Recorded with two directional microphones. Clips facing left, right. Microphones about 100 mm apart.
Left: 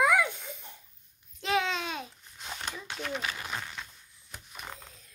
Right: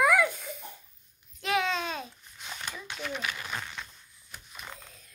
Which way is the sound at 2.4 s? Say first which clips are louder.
Left 1 dB; 30° left (ahead or behind).